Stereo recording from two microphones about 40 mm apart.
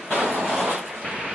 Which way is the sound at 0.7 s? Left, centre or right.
Centre.